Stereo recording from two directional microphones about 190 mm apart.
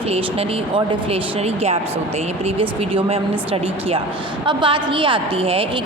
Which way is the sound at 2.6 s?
30° right (ahead or behind).